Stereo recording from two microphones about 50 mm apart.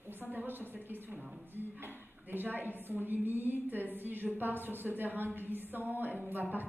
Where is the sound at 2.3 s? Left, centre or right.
Right.